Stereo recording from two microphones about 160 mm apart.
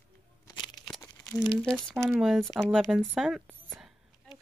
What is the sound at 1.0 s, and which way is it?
Crumpling, 20° left (ahead or behind).